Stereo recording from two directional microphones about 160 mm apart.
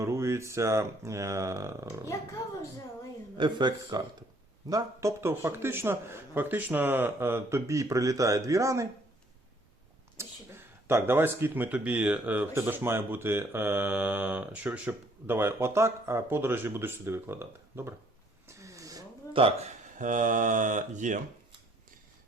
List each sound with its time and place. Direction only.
0.0 s speech: 20° right (ahead or behind)
3.3 s speech: 30° right (ahead or behind)
10.2 s speech: 15° right (ahead or behind)
18.4 s a sound: 20° right (ahead or behind)
19.3 s speech: 35° right (ahead or behind)
20.0 s mantra: 55° right (ahead or behind)